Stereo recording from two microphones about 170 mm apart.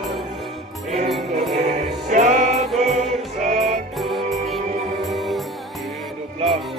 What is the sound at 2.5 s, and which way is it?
Music, centre (ahead or behind).